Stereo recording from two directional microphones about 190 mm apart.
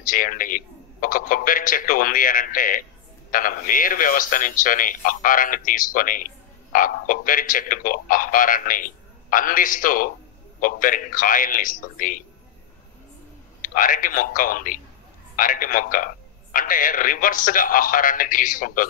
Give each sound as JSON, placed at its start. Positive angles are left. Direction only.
{"t": 0.0, "sound": "a man's voice", "side_deg": 45}
{"t": 13.6, "sound": "a man's voice", "side_deg": 45}